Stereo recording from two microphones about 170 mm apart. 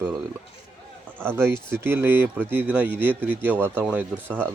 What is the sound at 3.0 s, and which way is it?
Speech, 10° left (ahead or behind).